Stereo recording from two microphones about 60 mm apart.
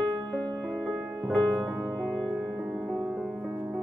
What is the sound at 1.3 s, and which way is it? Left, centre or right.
Music, centre.